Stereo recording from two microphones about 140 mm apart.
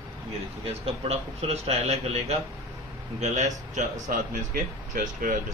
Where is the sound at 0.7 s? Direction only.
45° right (ahead or behind).